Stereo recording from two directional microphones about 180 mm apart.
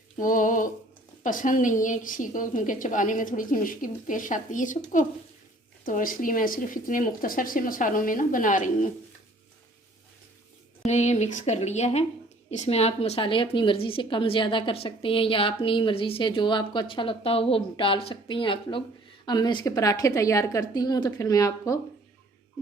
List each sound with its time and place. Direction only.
0.2 s a woman's voice: 45° left (ahead or behind)
5.8 s a woman's voice: 50° left (ahead or behind)
10.8 s a woman's voice: 40° left (ahead or behind); by 21.8 s 20° left (ahead or behind)